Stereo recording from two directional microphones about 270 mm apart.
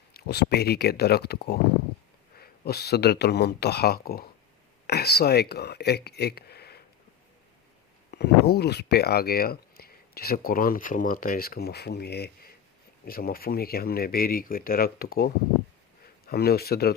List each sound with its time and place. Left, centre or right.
0.1 s speech: left
8.1 s speech: left